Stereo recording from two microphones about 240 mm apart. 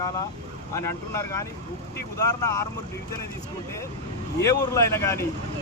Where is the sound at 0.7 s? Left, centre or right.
Centre.